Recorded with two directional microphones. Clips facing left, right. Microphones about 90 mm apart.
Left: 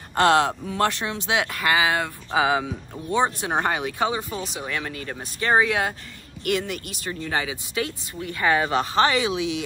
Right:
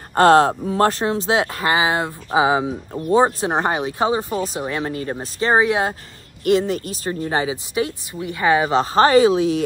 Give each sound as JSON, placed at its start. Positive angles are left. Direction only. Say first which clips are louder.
{"t": 0.1, "sound": "speech", "louder": "right 6 dB", "side_deg": -40}
{"t": 8.8, "sound": "speech", "louder": "right 8 dB", "side_deg": -40}